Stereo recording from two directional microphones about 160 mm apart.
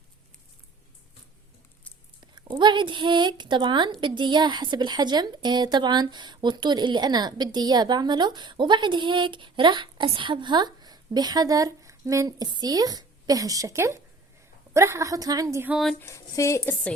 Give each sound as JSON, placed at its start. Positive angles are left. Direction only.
{"t": 2.2, "sound": "a woman's voice", "side_deg": -30}
{"t": 15.7, "sound": "a sound", "side_deg": 0}
{"t": 16.0, "sound": "speech", "side_deg": 15}